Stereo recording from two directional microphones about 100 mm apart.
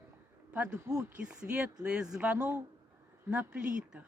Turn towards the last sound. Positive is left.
turn(degrees=-10)  # may be behind; listen again after turning